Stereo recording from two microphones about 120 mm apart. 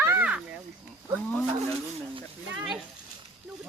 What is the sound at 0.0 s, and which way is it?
Snake, 15° right (ahead or behind).